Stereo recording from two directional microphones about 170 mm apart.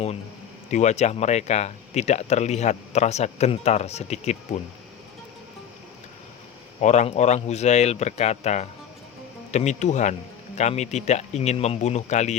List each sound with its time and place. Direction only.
0.7 s speech: 45° left (ahead or behind)
6.8 s speech: 40° left (ahead or behind)